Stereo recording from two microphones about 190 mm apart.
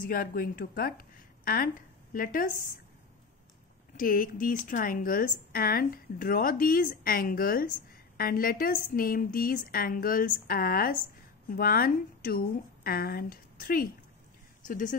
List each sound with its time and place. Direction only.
0.0 s a woman's voice: 50° left (ahead or behind)
3.9 s a woman's voice: 45° left (ahead or behind)